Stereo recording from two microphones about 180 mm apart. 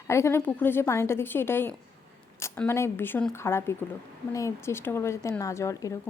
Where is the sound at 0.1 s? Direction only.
15° left (ahead or behind).